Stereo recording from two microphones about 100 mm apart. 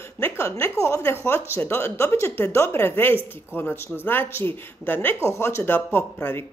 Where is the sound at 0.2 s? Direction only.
25° left (ahead or behind).